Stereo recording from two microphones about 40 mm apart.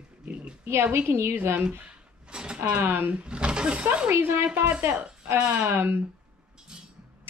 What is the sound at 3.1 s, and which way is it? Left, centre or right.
Speech, right.